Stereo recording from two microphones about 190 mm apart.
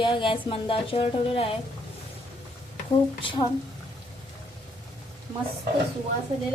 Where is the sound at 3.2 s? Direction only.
25° left (ahead or behind).